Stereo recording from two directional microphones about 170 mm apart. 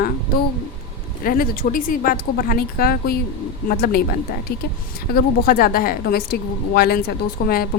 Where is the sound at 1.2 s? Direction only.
60° left (ahead or behind).